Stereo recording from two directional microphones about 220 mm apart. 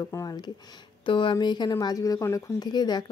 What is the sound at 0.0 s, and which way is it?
Speech, 15° left (ahead or behind).